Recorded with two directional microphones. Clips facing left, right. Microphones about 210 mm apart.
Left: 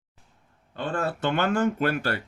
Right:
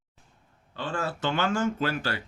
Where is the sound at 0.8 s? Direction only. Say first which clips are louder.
Left 3 dB; 55° left (ahead or behind).